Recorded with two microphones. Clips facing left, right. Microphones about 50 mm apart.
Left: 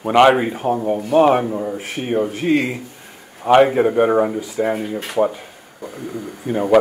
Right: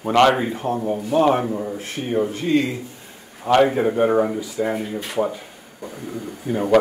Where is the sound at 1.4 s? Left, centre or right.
Centre.